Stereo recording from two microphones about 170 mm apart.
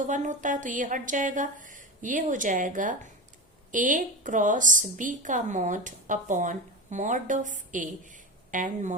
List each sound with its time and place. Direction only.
0.1 s a woman's voice: 45° right (ahead or behind)